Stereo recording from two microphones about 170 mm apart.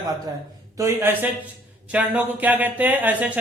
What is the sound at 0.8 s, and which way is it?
A man's voice, 15° right (ahead or behind).